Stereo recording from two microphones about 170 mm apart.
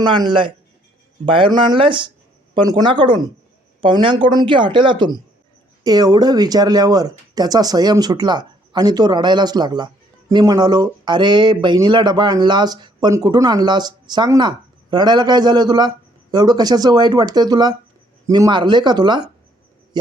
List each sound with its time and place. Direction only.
0.0 s speech: 25° right (ahead or behind)